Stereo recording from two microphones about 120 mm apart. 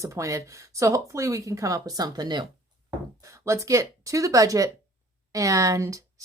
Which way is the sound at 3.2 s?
25° right (ahead or behind).